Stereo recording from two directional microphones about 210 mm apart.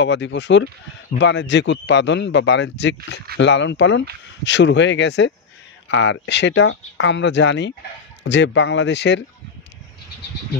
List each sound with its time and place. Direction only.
0.0 s speech: 60° left (ahead or behind)